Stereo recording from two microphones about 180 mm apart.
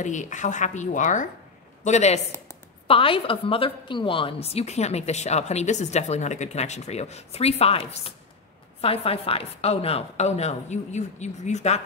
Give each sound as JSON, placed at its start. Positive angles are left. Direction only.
{"t": 0.0, "sound": "a woman's voice", "side_deg": 45}